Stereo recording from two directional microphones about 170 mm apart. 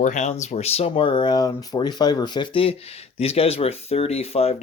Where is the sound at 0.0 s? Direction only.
45° left (ahead or behind).